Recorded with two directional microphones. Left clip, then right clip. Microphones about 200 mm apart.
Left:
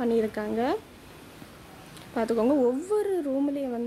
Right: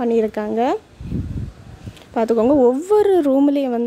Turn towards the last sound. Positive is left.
turn(degrees=-50)  # may be behind; listen again after turning